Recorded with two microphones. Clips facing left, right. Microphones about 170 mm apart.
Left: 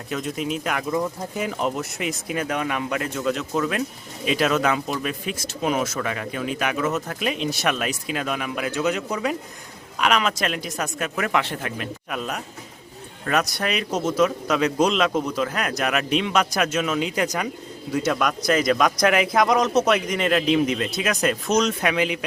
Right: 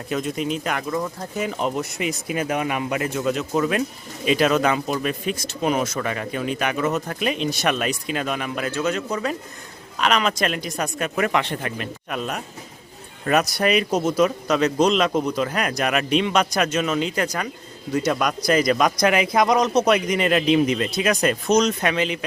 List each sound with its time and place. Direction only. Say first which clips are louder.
0.1 s speech: right 2 dB; centre (ahead or behind)
1.4 s speech: right 1 dB; centre (ahead or behind)
8.7 s speech: left 1 dB; 15° left (ahead or behind)
10.0 s speech: right 1 dB; 5° left (ahead or behind)